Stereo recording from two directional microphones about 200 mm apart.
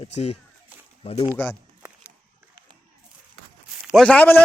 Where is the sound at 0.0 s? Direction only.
30° left (ahead or behind).